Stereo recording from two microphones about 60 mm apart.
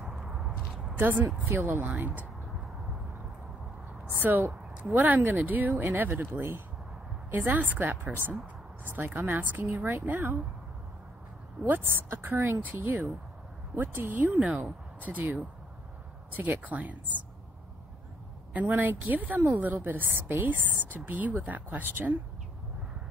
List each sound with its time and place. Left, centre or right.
0.0 s a sound: centre
0.9 s a woman's voice: right
4.1 s a woman's voice: right
11.6 s a woman's voice: right
18.5 s a woman's voice: right